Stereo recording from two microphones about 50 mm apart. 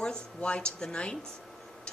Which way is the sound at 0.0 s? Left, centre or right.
Centre.